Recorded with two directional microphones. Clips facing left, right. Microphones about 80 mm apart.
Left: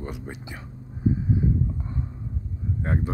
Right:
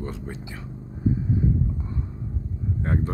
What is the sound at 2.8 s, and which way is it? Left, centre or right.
Speech, centre.